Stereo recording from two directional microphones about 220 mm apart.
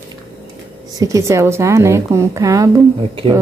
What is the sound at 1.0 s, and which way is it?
A woman's voice, 15° right (ahead or behind).